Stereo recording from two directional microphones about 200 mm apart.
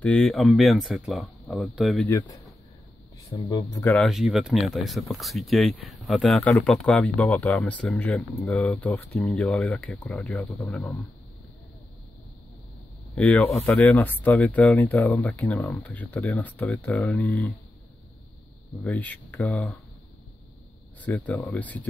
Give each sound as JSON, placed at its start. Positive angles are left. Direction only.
{"t": 0.0, "sound": "speech", "side_deg": 5}
{"t": 2.0, "sound": "speech", "side_deg": 15}
{"t": 13.1, "sound": "speech", "side_deg": 5}
{"t": 18.8, "sound": "speech", "side_deg": 5}
{"t": 21.0, "sound": "speech", "side_deg": 10}